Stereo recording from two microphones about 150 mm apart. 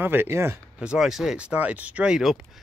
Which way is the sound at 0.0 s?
15° right (ahead or behind).